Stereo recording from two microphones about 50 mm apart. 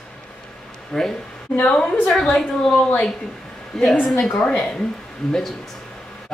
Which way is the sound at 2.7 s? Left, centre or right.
Left.